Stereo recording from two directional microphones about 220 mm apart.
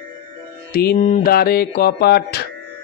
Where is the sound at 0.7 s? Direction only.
40° left (ahead or behind).